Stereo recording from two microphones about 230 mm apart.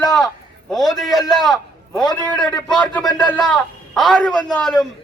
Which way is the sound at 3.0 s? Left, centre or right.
Centre.